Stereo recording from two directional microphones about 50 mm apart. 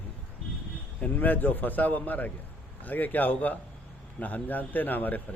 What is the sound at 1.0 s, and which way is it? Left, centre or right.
Speech, left.